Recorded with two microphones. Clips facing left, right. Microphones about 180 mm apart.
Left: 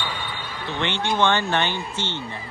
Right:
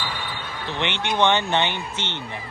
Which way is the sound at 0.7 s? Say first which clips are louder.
Left 1 dB; 20° right (ahead or behind).